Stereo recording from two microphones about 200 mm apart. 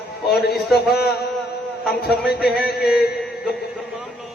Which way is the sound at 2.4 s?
55° left (ahead or behind).